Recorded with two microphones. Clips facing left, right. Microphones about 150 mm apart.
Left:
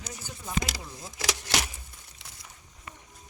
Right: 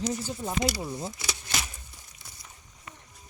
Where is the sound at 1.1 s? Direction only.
90° left.